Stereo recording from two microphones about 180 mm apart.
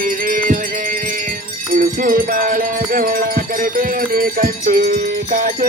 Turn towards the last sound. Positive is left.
turn(degrees=-50)  # may be behind; listen again after turning